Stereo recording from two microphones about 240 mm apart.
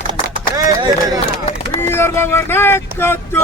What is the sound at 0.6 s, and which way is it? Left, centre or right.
Speech, centre.